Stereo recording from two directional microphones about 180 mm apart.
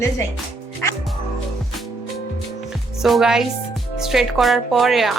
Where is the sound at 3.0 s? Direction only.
Centre (ahead or behind).